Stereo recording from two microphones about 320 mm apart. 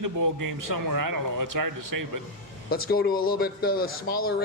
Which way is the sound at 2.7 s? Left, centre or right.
Left.